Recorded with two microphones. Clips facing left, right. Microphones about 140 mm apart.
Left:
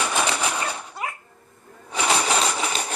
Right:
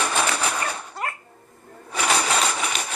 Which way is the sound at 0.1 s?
15° left (ahead or behind).